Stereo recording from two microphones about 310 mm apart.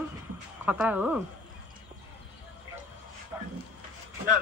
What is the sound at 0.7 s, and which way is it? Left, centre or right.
Speech, centre.